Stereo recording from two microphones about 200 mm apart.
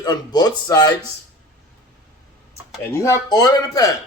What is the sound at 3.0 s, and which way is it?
Speech, 15° left (ahead or behind).